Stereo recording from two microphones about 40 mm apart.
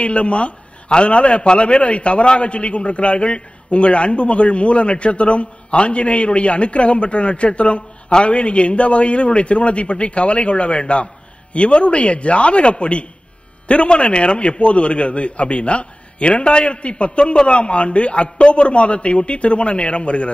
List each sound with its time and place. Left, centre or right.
0.0 s a man's voice: left